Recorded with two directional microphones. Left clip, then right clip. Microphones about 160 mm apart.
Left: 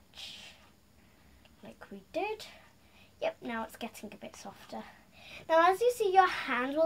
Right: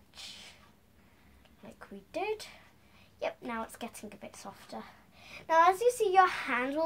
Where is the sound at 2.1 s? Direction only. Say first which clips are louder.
Even; 15° right (ahead or behind).